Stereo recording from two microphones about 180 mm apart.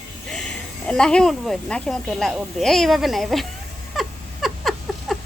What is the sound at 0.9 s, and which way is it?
Speech, 5° left (ahead or behind).